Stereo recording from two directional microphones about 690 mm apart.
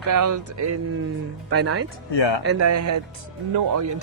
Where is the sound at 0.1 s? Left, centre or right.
Right.